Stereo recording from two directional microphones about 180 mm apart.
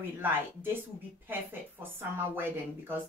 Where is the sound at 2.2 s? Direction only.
10° right (ahead or behind).